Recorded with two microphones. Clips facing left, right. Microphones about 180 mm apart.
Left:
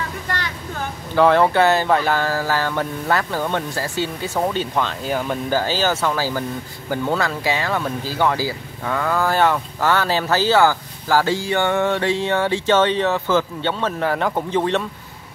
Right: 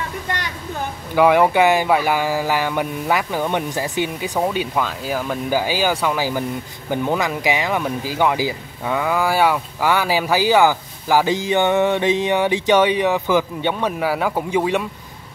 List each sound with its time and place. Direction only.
0.3 s a child's voice: 20° right (ahead or behind); by 5.4 s centre (ahead or behind)
5.5 s speech: 10° right (ahead or behind)